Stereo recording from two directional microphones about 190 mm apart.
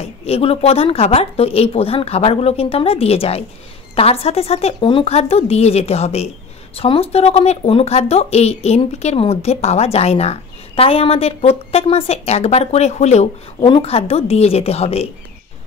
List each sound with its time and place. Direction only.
0.0 s speech: 30° left (ahead or behind)